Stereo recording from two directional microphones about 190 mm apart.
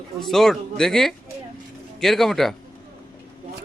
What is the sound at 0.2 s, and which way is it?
Speech, centre (ahead or behind).